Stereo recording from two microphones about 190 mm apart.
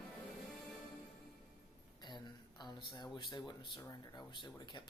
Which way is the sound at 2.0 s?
25° left (ahead or behind).